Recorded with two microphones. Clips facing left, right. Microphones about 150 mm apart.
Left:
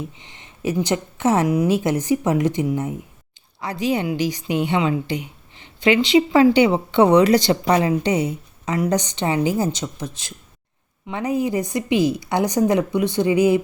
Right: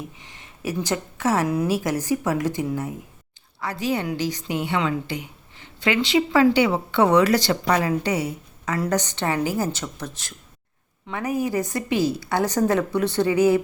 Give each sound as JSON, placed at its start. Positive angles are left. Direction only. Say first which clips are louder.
{"t": 0.0, "sound": "a woman's voice", "louder": "left 4 dB", "side_deg": 25}